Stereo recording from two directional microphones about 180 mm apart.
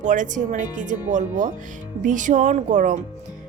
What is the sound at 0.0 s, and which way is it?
Speech, 45° right (ahead or behind).